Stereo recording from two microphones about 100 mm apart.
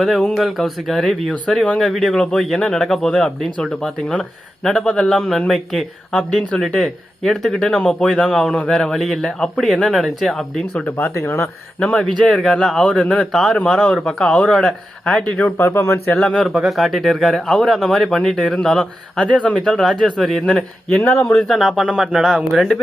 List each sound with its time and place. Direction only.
0.0 s speech: 5° left (ahead or behind)
10.8 s speech: 20° left (ahead or behind)
11.8 s a man's voice: 5° left (ahead or behind); by 16.1 s 25° left (ahead or behind)
16.2 s speech: 5° left (ahead or behind)
21.0 s speech: 20° left (ahead or behind)
21.2 s speech: 5° left (ahead or behind)